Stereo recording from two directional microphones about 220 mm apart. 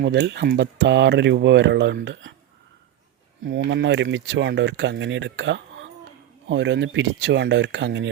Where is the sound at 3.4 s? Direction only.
55° right (ahead or behind).